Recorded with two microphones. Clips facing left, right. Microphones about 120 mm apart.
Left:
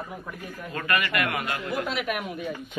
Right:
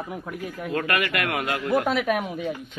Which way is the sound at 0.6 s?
85° right.